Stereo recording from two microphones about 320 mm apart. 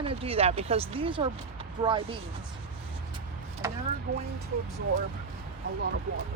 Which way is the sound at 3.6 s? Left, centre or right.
Centre.